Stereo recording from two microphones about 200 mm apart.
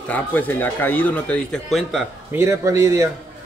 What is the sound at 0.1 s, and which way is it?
Speech, 10° left (ahead or behind).